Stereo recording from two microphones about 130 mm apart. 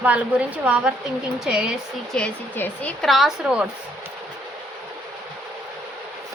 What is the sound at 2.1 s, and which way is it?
A woman's voice, 10° left (ahead or behind).